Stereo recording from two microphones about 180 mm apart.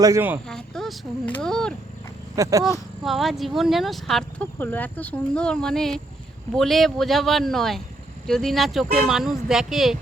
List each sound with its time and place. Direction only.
0.0 s speech: 15° right (ahead or behind)
0.4 s speech: 5° left (ahead or behind)
2.3 s speech: 15° right (ahead or behind)
3.0 s speech: centre (ahead or behind)